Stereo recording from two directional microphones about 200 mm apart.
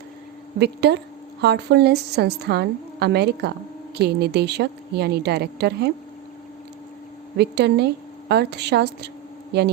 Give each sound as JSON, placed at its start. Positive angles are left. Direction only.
{"t": 0.6, "sound": "a woman's voice", "side_deg": -55}
{"t": 7.3, "sound": "a woman's voice", "side_deg": -55}